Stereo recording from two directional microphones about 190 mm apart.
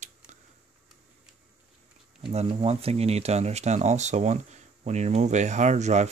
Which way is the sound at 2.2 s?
30° right (ahead or behind).